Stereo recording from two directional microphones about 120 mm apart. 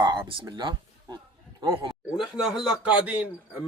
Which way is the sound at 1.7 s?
45° right (ahead or behind).